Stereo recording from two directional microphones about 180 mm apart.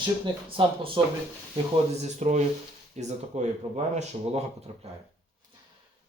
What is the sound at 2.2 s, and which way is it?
Speech, 40° right (ahead or behind).